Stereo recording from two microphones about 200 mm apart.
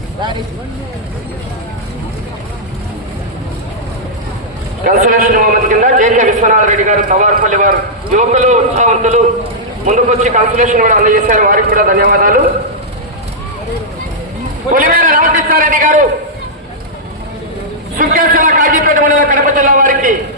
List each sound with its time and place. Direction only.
4.8 s a man's voice: 45° right (ahead or behind)
14.7 s a man's voice: 45° right (ahead or behind)
17.9 s a man's voice: 45° right (ahead or behind)